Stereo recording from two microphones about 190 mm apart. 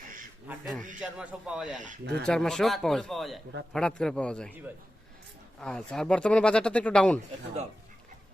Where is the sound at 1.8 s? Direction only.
40° right (ahead or behind).